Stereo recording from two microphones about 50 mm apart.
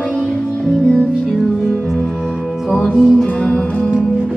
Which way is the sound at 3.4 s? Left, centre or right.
Centre.